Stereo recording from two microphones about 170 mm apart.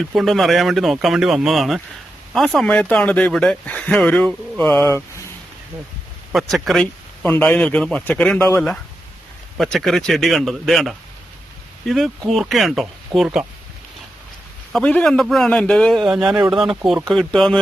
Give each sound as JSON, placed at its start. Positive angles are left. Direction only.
{"t": 0.0, "sound": "speech", "side_deg": 0}
{"t": 6.3, "sound": "speech", "side_deg": 0}
{"t": 9.6, "sound": "speech", "side_deg": 0}
{"t": 14.7, "sound": "speech", "side_deg": 5}